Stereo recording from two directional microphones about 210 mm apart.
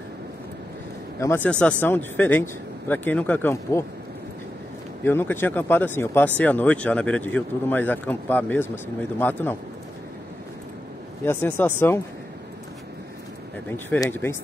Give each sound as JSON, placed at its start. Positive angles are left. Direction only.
{"t": 1.2, "sound": "speech", "side_deg": 10}
{"t": 5.0, "sound": "speech", "side_deg": 10}
{"t": 11.2, "sound": "speech", "side_deg": 10}
{"t": 13.7, "sound": "speech", "side_deg": 10}